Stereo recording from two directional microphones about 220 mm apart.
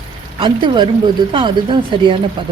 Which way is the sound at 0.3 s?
20° right (ahead or behind).